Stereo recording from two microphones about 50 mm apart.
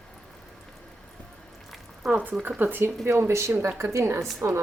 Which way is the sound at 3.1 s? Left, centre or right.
Right.